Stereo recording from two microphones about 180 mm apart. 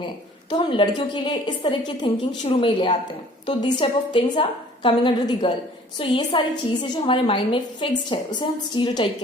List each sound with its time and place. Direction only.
0.5 s a woman's voice: 25° left (ahead or behind)